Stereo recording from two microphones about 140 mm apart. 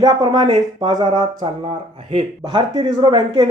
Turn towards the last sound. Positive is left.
turn(degrees=-30)  # may be behind; listen again after turning